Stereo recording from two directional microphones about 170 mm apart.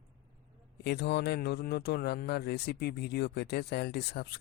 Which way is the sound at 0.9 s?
75° left (ahead or behind).